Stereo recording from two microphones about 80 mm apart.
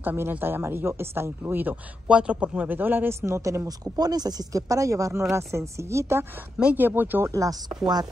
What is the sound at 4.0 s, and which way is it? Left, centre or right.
Speech, right.